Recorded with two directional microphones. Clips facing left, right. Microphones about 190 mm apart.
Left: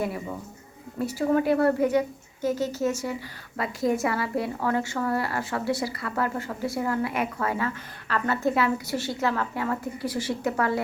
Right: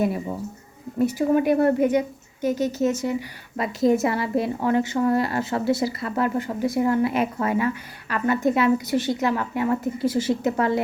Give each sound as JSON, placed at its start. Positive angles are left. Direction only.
{"t": 0.9, "sound": "a woman's voice", "side_deg": -15}